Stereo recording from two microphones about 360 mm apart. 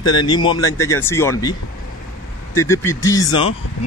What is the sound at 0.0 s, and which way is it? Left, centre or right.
Speech, centre.